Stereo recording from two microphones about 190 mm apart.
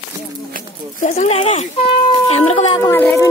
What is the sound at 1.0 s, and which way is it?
Speech, 40° left (ahead or behind).